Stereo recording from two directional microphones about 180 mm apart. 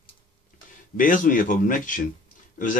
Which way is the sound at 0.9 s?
50° left (ahead or behind).